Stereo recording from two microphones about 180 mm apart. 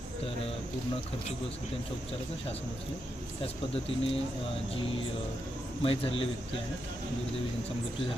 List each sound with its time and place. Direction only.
3.4 s a man's voice: 30° left (ahead or behind)
5.8 s a man's voice: 30° left (ahead or behind)